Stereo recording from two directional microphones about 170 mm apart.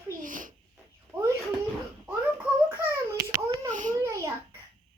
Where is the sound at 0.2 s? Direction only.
50° right (ahead or behind).